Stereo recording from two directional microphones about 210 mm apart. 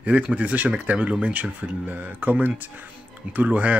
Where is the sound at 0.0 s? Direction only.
5° right (ahead or behind).